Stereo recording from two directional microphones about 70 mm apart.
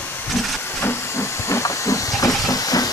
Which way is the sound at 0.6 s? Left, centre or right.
Left.